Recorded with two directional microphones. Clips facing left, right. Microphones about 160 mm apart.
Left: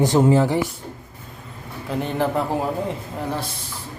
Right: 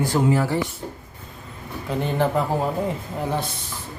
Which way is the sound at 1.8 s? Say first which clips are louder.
Even; centre (ahead or behind).